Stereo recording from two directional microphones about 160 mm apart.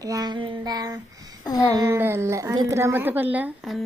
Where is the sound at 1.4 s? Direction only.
25° left (ahead or behind).